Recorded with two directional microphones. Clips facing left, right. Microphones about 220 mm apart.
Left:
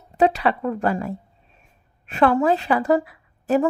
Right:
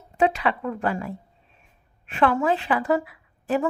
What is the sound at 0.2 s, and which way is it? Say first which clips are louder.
A woman's voice: left 3 dB; 40° left (ahead or behind).